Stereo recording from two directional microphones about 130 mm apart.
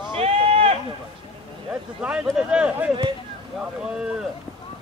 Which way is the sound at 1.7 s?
10° right (ahead or behind).